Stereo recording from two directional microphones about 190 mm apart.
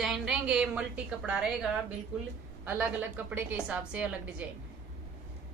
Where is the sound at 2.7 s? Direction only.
10° right (ahead or behind).